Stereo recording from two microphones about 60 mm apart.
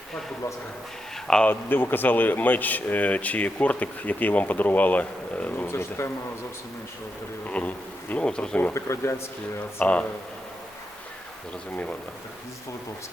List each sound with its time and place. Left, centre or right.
1.5 s speech: left
5.6 s speech: left
7.4 s speech: left
8.7 s speech: left
9.8 s speech: left